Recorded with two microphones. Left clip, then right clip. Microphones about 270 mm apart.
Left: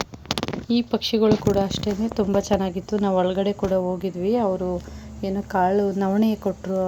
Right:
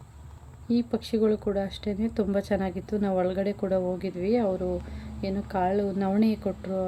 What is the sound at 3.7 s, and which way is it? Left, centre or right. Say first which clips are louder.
Speech: left 4 dB; centre.